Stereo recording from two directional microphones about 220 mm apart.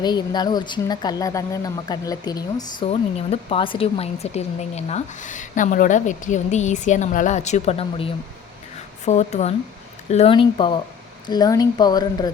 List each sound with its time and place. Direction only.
0.0 s speech: 20° left (ahead or behind)